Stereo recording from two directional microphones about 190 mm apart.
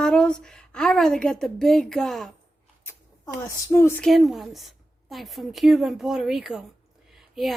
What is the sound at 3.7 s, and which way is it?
Speech, 15° left (ahead or behind).